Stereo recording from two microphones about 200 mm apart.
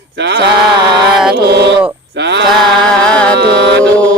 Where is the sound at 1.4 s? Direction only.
55° right (ahead or behind).